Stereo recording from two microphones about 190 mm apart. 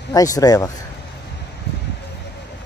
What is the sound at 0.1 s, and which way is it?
Speech, 20° left (ahead or behind).